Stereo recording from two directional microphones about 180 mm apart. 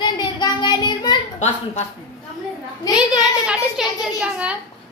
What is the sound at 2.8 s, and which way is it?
Speech, 20° left (ahead or behind).